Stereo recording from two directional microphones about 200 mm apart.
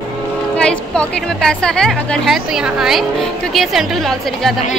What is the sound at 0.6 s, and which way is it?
Speech, 5° left (ahead or behind).